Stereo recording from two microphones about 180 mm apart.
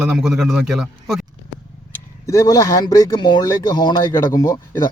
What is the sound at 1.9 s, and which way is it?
A man's voice, 15° left (ahead or behind).